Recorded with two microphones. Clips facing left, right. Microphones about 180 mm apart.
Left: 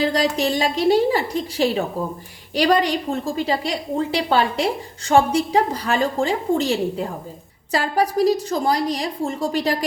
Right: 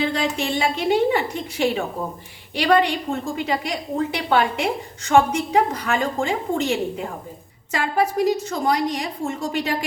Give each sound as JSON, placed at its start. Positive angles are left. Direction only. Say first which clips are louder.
{"t": 0.0, "sound": "a woman's voice", "louder": "left 3 dB", "side_deg": 40}